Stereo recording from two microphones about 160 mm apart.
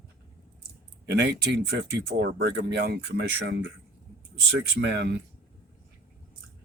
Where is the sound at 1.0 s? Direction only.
85° right.